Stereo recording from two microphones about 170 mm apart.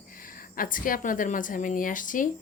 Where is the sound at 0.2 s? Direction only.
55° left (ahead or behind).